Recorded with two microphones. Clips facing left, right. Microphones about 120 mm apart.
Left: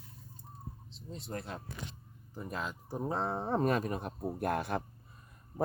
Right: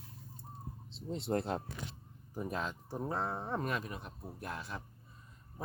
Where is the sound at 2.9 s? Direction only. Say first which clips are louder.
Left 5 dB; 15° left (ahead or behind).